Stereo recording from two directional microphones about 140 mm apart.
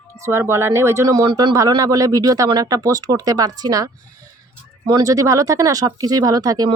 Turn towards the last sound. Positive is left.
turn(degrees=-30)  # may be behind; listen again after turning